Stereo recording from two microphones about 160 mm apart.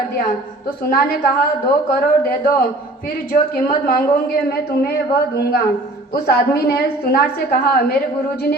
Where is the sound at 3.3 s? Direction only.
65° left (ahead or behind).